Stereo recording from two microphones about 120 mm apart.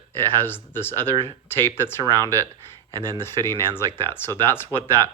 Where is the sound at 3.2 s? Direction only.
20° left (ahead or behind).